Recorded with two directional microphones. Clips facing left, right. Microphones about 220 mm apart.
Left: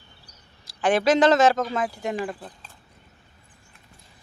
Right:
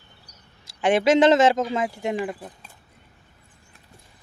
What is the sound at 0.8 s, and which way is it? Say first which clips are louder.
Speech: right 2 dB; 25° right (ahead or behind).